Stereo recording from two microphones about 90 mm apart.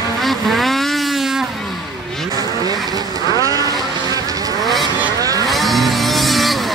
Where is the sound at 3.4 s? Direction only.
40° right (ahead or behind).